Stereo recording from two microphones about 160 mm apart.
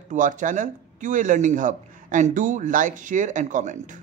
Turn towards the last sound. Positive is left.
turn(degrees=-50)  # may be behind; listen again after turning